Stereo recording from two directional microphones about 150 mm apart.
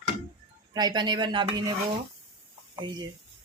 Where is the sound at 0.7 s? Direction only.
30° right (ahead or behind).